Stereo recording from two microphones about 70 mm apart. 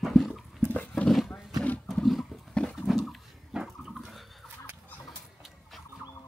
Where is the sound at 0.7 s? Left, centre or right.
Centre.